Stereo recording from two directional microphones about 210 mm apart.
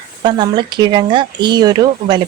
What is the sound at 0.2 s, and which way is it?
Speech, 20° right (ahead or behind).